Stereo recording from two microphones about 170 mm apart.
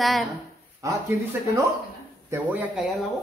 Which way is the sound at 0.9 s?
15° right (ahead or behind).